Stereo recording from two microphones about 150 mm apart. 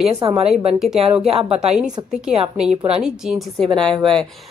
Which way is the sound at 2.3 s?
40° right (ahead or behind).